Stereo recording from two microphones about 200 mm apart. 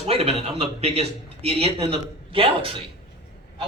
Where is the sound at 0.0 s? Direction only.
30° right (ahead or behind).